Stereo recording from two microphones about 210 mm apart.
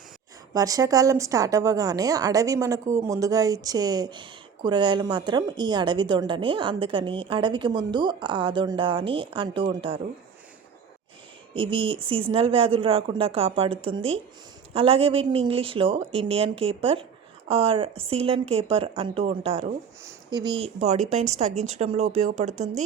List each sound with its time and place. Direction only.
0.5 s a woman's voice: 15° right (ahead or behind)
11.5 s a woman's voice: 25° right (ahead or behind)